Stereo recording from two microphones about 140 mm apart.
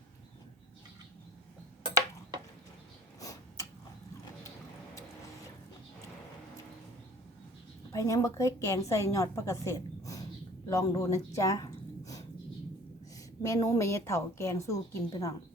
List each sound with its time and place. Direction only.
3.2 s a sound: 25° left (ahead or behind)
7.9 s a woman's voice: 20° left (ahead or behind)
13.4 s a woman's voice: 25° left (ahead or behind)